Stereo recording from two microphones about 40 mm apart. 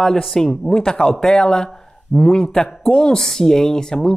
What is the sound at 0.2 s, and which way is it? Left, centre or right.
Speech, centre.